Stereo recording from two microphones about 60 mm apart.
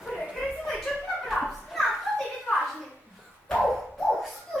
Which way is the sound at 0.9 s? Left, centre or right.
Centre.